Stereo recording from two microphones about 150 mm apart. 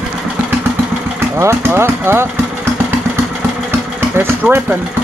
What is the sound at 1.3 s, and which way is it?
Vehicle, 15° right (ahead or behind).